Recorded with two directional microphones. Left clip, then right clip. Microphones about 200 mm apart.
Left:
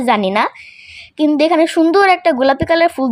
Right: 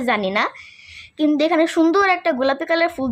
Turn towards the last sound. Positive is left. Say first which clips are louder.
# left 6 dB
turn(degrees=15)  # may be behind; listen again after turning